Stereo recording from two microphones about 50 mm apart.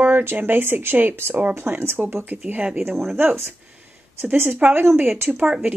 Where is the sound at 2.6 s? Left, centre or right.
Centre.